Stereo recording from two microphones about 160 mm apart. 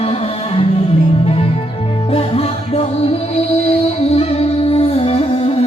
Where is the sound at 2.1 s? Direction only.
40° left (ahead or behind).